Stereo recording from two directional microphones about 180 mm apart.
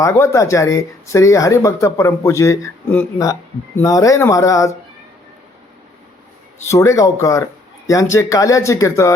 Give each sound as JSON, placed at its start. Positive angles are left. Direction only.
{"t": 0.0, "sound": "speech", "side_deg": 15}
{"t": 6.7, "sound": "speech", "side_deg": 15}